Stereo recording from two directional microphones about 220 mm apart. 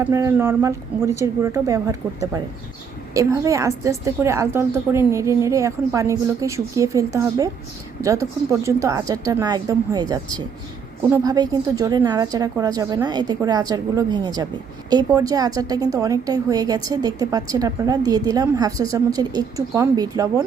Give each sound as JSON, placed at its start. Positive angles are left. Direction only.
{"t": 0.0, "sound": "a woman's voice", "side_deg": -15}